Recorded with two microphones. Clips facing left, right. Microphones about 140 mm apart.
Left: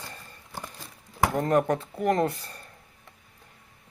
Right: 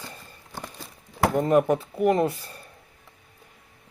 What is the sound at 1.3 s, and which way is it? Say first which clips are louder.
Speech: right 4 dB; 5° right (ahead or behind).